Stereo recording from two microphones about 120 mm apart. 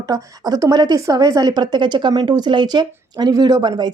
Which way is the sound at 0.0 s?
30° right (ahead or behind).